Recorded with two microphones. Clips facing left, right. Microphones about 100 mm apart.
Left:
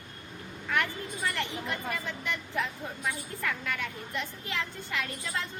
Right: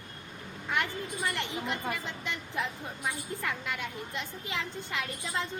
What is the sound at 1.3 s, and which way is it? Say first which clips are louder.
A woman's voice: even; 20° right (ahead or behind).